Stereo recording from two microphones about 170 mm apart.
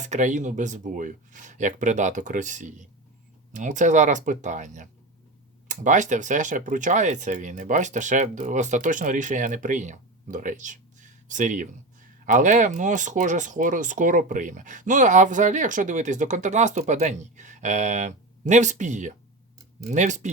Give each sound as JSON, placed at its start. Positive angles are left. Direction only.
{"t": 0.0, "sound": "speech", "side_deg": -45}